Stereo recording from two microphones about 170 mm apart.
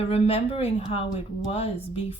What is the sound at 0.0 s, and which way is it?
A woman's voice, 35° left (ahead or behind).